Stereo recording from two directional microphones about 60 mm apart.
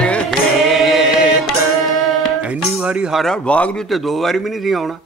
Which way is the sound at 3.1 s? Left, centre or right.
Centre.